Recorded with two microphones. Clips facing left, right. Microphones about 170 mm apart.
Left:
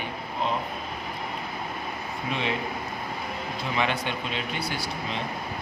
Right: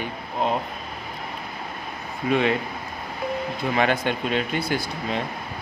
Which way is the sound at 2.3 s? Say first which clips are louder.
Right 9 dB; 50° right (ahead or behind).